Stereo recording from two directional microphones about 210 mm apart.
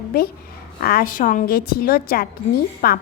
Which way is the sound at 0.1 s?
45° left (ahead or behind).